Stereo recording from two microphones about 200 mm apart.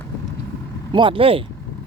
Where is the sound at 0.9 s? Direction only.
25° right (ahead or behind).